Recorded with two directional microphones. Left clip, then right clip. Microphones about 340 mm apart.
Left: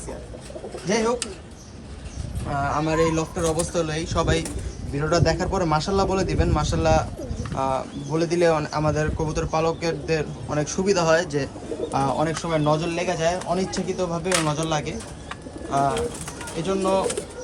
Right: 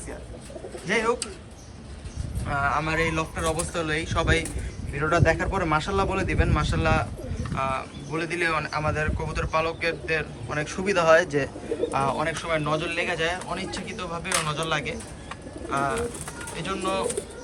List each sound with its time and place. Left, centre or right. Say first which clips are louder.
0.9 s speech: left 1 dB; centre
2.5 s speech: left 1 dB; centre
14.3 s speech: left 1 dB; centre